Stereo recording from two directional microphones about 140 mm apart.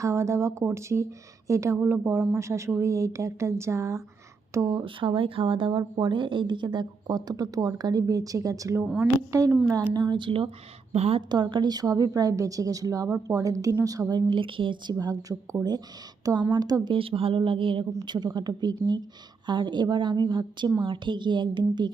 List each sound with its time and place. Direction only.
0.0 s a woman's voice: 20° right (ahead or behind); by 10.5 s 35° right (ahead or behind)
10.9 s a woman's voice: 50° right (ahead or behind)
11.3 s a woman's voice: 35° right (ahead or behind)